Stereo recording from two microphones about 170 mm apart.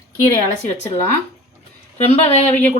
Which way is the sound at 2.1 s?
40° left (ahead or behind).